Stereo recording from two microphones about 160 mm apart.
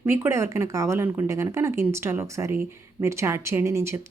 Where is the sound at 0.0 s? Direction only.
15° right (ahead or behind).